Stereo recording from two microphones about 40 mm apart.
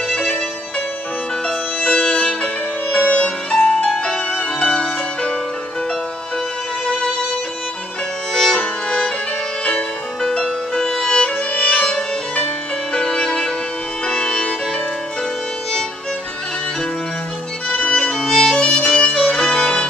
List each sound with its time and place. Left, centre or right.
0.1 s music: left
1.8 s music: left
8.3 s music: centre
8.5 s music: left
10.2 s music: centre
11.1 s violin: left
12.9 s music: left
17.6 s music: left
18.1 s music: centre